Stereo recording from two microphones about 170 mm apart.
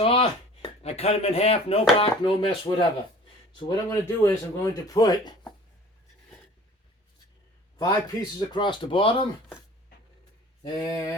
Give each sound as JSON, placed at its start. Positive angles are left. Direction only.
{"t": 0.0, "sound": "speech", "side_deg": 35}
{"t": 7.8, "sound": "speech", "side_deg": 20}
{"t": 10.6, "sound": "speech", "side_deg": 25}